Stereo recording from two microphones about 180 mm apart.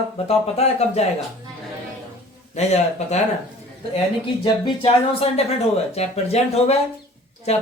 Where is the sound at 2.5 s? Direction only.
40° left (ahead or behind).